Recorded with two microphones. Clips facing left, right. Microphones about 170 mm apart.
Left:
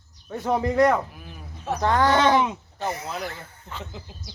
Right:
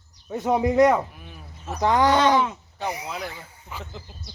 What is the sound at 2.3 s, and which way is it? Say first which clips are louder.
Speech: even; 15° left (ahead or behind).